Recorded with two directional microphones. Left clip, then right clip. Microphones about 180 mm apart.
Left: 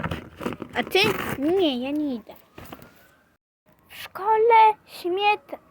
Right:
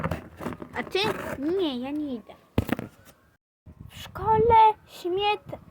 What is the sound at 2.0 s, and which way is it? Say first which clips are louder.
Speech: left 4 dB; 35° left (ahead or behind).